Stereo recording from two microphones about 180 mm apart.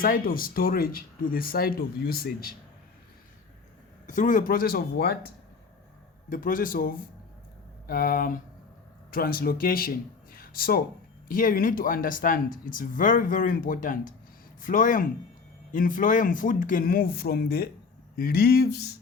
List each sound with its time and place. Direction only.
0.0 s speech: 50° left (ahead or behind)
4.0 s speech: 45° left (ahead or behind)
6.3 s speech: 50° left (ahead or behind)
10.3 s a sound: 55° left (ahead or behind)
11.3 s speech: 50° left (ahead or behind)